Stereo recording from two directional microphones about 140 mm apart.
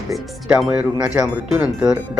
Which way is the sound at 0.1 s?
5° right (ahead or behind).